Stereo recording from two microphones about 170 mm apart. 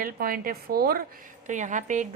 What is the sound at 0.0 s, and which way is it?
A woman's voice, 60° right (ahead or behind).